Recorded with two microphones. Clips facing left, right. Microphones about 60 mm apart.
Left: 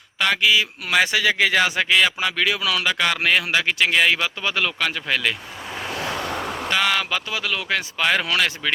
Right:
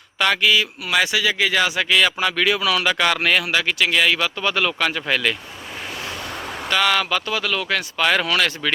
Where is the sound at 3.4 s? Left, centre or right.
Left.